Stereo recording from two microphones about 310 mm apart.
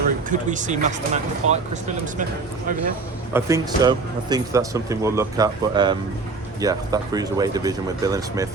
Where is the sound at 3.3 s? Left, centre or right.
Centre.